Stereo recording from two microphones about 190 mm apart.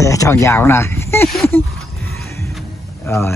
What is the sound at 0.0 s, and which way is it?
Speech, 15° left (ahead or behind).